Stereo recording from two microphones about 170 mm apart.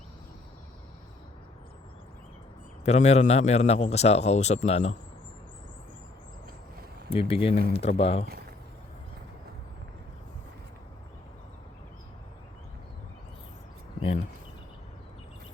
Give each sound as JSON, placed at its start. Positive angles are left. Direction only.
{"t": 2.8, "sound": "a man's voice", "side_deg": 40}
{"t": 7.1, "sound": "a man's voice", "side_deg": 35}